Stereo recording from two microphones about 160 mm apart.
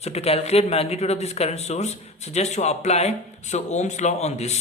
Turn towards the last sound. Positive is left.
turn(degrees=45)  # may be behind; listen again after turning